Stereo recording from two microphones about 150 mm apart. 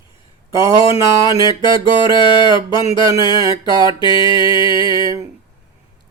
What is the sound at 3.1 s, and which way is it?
Mantra, 25° right (ahead or behind).